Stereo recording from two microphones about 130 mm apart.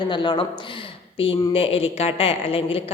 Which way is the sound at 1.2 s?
45° left (ahead or behind).